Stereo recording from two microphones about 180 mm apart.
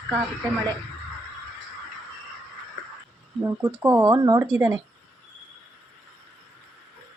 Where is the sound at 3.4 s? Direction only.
10° right (ahead or behind).